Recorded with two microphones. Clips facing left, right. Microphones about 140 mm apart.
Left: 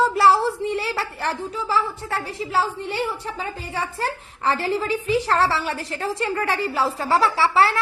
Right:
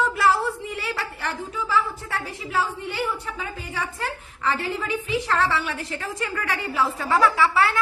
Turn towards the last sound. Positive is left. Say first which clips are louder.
# left 1 dB
turn(degrees=30)  # may be behind; listen again after turning